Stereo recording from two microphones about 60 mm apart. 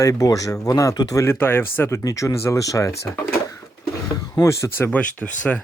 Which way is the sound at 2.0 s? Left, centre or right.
Left.